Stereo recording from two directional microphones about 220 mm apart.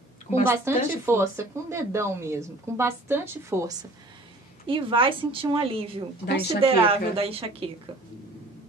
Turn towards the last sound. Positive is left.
turn(degrees=-25)  # may be behind; listen again after turning